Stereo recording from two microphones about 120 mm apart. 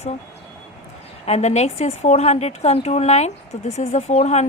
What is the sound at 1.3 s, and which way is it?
A woman's voice, 65° left (ahead or behind).